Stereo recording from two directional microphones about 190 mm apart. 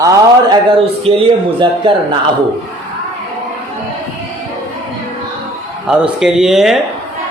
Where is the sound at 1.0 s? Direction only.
30° right (ahead or behind).